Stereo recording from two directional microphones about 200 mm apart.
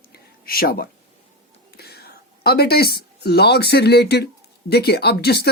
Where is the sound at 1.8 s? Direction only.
50° left (ahead or behind).